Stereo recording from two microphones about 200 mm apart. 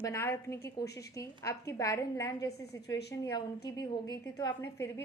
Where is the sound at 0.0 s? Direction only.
15° left (ahead or behind).